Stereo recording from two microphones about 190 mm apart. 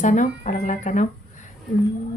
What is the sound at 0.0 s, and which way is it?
Speech, 40° left (ahead or behind).